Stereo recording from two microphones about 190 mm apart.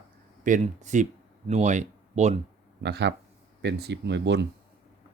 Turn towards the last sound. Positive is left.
turn(degrees=-65)  # may be behind; listen again after turning